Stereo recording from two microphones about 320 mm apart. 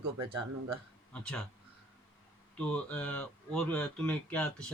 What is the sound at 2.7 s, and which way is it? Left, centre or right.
A man's voice, centre.